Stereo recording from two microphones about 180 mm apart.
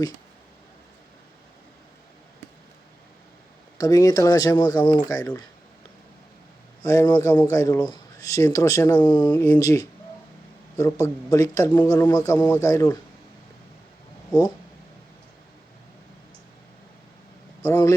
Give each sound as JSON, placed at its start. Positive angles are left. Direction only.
{"t": 3.8, "sound": "speech", "side_deg": 20}
{"t": 6.8, "sound": "a man's voice", "side_deg": 20}
{"t": 17.6, "sound": "speech", "side_deg": 15}